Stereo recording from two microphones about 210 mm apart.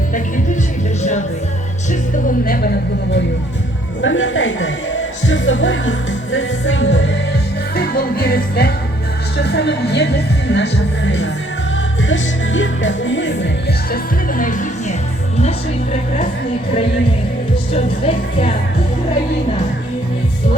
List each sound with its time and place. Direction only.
2.4 s music: 45° left (ahead or behind)
4.0 s music: 65° left (ahead or behind)
7.8 s music: 45° left (ahead or behind)
13.9 s music: 40° left (ahead or behind)
15.4 s speech: 30° left (ahead or behind)
17.7 s music: 30° left (ahead or behind)